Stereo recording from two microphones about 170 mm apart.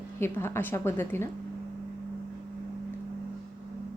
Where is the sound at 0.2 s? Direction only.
15° left (ahead or behind).